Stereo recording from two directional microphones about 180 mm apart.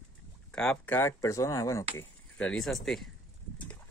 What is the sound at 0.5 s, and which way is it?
Speech, 5° left (ahead or behind).